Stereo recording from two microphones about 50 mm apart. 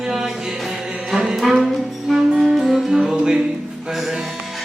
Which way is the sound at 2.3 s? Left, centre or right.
Centre.